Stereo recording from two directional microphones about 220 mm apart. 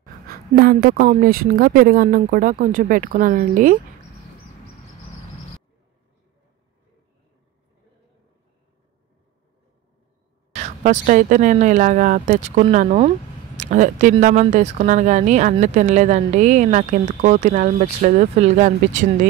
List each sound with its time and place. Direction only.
0.3 s speech: 45° right (ahead or behind)
10.5 s speech: 30° right (ahead or behind)